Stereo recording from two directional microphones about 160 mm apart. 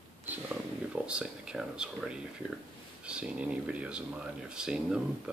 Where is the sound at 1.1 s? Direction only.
5° right (ahead or behind).